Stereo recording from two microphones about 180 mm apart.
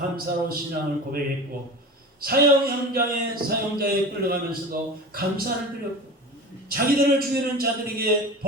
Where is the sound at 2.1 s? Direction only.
55° right (ahead or behind).